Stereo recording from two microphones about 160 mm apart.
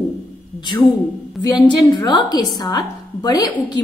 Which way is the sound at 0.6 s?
30° left (ahead or behind).